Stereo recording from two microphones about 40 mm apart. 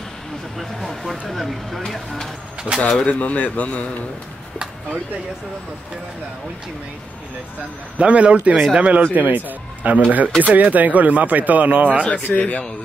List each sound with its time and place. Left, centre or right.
0.6 s speech: centre
2.7 s speech: right
3.1 s a man's voice: left
8.0 s speech: right
9.0 s speech: right
12.4 s a man's voice: left